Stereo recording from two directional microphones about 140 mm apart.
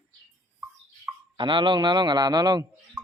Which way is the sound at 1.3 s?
35° right (ahead or behind).